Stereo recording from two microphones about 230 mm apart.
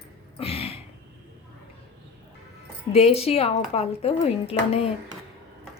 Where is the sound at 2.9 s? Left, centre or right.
Left.